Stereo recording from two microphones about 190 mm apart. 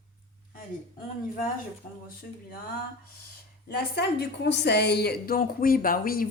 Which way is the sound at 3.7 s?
60° left (ahead or behind).